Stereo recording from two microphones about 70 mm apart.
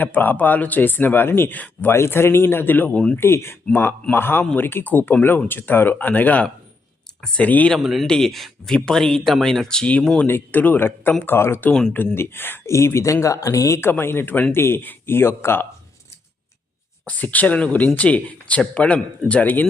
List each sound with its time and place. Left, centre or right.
0.0 s speech: left
1.9 s speech: left
7.8 s speech: centre
8.0 s speech: centre
10.2 s speech: left
13.8 s speech: left
17.1 s speech: left